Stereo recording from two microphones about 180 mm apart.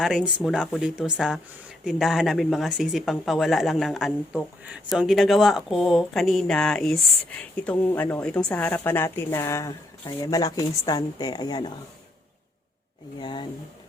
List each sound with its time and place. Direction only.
0.0 s speech: centre (ahead or behind); by 11.7 s 25° left (ahead or behind)
13.1 s speech: 25° left (ahead or behind)